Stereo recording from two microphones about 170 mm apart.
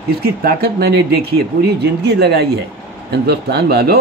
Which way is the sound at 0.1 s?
65° right (ahead or behind).